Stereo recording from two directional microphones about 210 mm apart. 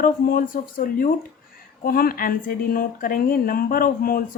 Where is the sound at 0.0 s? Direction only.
40° left (ahead or behind).